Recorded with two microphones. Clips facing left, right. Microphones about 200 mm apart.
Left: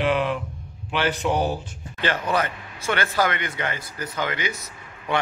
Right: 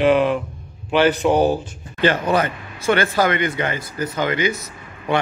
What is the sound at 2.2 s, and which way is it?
Speech, 30° right (ahead or behind).